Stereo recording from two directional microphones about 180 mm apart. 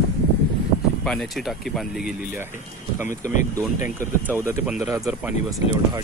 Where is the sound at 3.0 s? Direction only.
45° left (ahead or behind).